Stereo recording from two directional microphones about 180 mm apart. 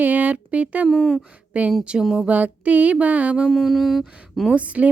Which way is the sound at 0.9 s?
5° left (ahead or behind).